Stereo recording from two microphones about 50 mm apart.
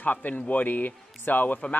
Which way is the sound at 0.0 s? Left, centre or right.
Left.